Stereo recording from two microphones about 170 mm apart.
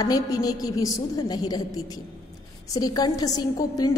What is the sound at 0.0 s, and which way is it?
A woman's voice, 20° left (ahead or behind).